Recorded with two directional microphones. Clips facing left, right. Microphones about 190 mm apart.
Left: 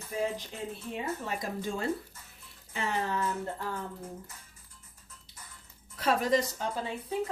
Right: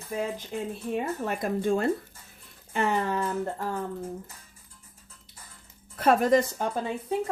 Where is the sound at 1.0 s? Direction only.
60° right (ahead or behind).